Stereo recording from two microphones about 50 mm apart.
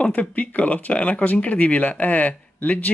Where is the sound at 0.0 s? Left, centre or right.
Left.